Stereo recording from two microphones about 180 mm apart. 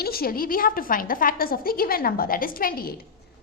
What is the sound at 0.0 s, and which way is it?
A woman's voice, 55° left (ahead or behind).